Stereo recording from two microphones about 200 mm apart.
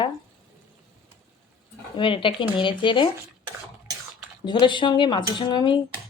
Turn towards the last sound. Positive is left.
turn(degrees=20)  # may be behind; listen again after turning